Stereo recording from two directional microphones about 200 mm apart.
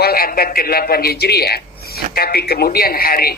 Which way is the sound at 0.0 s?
50° left (ahead or behind).